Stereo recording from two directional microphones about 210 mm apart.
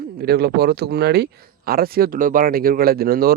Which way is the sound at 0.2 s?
50° right (ahead or behind).